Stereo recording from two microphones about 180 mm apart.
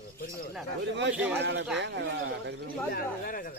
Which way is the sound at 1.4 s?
75° right (ahead or behind).